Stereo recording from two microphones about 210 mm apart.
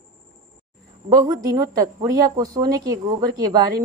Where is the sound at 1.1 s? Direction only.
15° right (ahead or behind).